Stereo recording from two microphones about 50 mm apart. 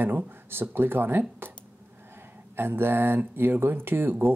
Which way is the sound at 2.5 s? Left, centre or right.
Right.